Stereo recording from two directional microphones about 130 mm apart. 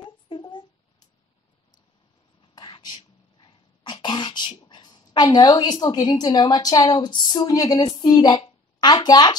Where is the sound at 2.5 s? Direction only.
35° left (ahead or behind).